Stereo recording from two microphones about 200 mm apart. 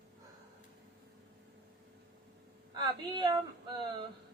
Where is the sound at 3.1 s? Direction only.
20° right (ahead or behind).